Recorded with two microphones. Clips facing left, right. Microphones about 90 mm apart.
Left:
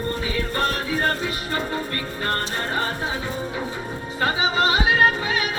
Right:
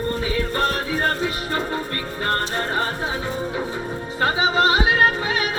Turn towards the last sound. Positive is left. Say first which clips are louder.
# even
turn(degrees=-30)  # may be behind; listen again after turning